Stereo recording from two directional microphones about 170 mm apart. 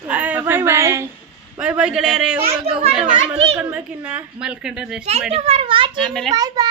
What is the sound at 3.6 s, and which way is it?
Speech, 5° right (ahead or behind).